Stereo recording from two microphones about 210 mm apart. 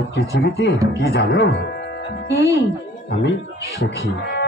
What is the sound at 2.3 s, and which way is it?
Speech, 15° right (ahead or behind).